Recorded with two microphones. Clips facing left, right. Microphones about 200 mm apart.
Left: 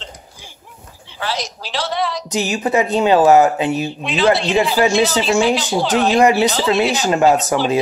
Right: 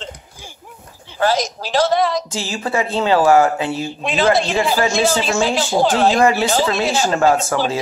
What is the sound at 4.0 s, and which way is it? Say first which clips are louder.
Speech: even; 45° right (ahead or behind).